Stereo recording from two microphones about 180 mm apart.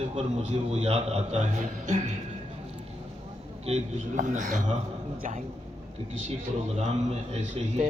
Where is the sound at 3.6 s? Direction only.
40° right (ahead or behind).